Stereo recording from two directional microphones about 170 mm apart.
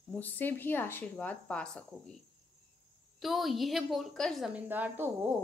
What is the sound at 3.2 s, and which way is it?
A woman's voice, centre (ahead or behind).